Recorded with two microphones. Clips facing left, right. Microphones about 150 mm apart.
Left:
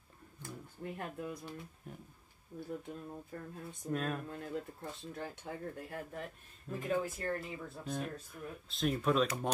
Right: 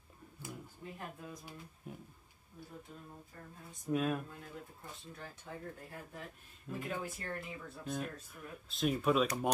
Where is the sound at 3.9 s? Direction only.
5° right (ahead or behind).